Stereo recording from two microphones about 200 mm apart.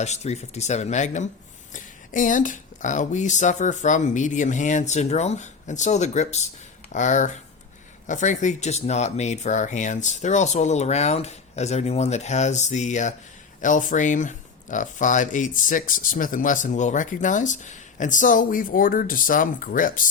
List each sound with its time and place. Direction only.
0.0 s speech: 35° left (ahead or behind)